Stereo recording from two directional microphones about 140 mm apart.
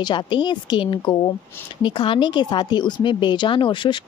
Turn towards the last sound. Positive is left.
turn(degrees=35)  # may be behind; listen again after turning